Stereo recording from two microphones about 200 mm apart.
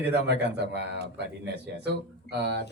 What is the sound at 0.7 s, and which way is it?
A man's voice, 55° right (ahead or behind).